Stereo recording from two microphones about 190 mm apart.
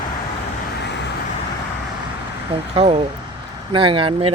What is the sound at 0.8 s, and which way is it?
Vehicle, 65° left (ahead or behind).